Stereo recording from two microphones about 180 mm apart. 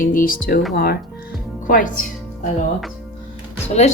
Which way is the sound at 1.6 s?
50° left (ahead or behind).